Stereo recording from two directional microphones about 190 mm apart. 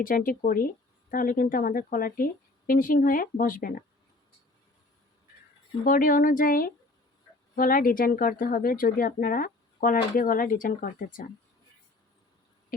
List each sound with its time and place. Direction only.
0.0 s speech: 50° left (ahead or behind)
5.8 s speech: 45° left (ahead or behind)